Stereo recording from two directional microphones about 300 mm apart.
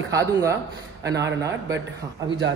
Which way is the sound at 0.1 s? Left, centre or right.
Centre.